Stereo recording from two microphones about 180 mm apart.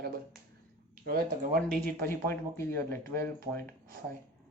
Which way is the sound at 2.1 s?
15° left (ahead or behind).